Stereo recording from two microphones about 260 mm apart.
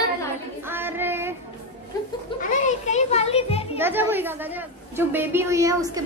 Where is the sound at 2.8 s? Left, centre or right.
Left.